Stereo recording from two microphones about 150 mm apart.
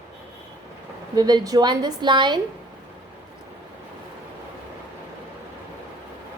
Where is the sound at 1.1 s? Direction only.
25° right (ahead or behind).